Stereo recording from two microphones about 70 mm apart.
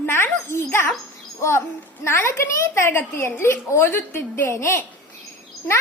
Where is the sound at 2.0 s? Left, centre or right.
Left.